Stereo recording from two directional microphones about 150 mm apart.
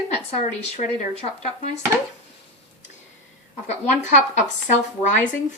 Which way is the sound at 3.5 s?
50° left (ahead or behind).